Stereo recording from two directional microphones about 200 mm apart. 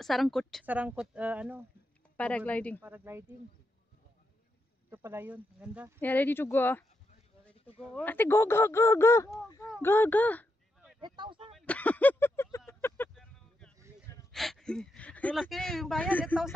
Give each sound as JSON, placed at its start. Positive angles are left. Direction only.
{"t": 0.0, "sound": "a woman's voice", "side_deg": 0}
{"t": 2.1, "sound": "speech", "side_deg": 5}
{"t": 2.8, "sound": "speech", "side_deg": -10}
{"t": 4.9, "sound": "speech", "side_deg": -10}
{"t": 5.9, "sound": "speech", "side_deg": 10}
{"t": 7.9, "sound": "speech", "side_deg": 10}
{"t": 11.0, "sound": "speech", "side_deg": -25}
{"t": 11.5, "sound": "vehicle", "side_deg": 5}
{"t": 14.3, "sound": "speech", "side_deg": 0}